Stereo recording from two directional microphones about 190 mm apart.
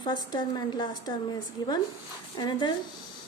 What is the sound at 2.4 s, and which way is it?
Speech, 25° left (ahead or behind).